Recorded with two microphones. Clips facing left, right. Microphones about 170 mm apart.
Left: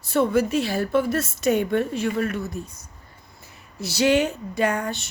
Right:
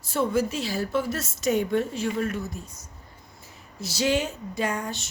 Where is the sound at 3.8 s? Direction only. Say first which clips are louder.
Left 5 dB; 65° left (ahead or behind).